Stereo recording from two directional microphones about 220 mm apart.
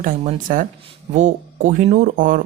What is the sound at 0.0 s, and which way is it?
Speech, 35° right (ahead or behind).